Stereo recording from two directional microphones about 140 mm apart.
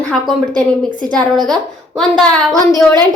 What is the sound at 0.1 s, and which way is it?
Speech, 5° left (ahead or behind).